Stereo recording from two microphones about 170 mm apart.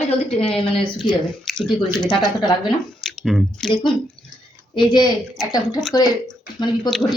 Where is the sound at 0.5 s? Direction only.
Centre (ahead or behind).